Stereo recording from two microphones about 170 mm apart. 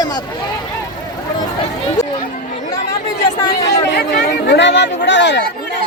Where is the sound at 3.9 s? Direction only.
80° left.